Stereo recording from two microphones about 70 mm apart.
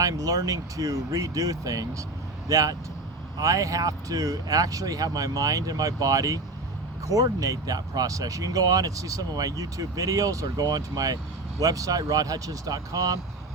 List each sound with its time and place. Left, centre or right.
0.0 s speech: right